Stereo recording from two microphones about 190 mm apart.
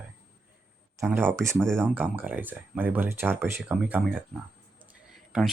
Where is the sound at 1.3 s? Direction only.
15° right (ahead or behind).